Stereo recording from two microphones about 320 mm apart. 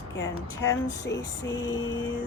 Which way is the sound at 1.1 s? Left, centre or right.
Left.